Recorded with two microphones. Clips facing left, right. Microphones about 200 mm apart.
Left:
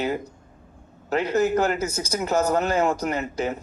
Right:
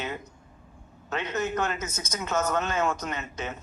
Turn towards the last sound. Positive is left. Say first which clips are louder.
# left 8 dB
turn(degrees=35)  # may be behind; listen again after turning